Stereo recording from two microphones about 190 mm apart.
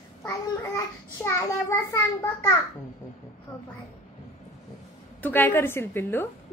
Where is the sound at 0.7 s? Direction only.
15° left (ahead or behind).